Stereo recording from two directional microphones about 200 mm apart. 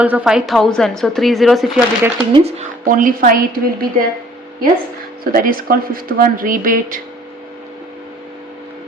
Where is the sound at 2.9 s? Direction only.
40° right (ahead or behind).